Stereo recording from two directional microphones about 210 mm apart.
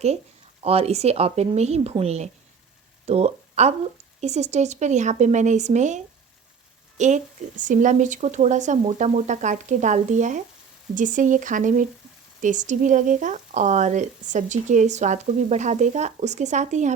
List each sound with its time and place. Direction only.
0.6 s speech: 30° right (ahead or behind)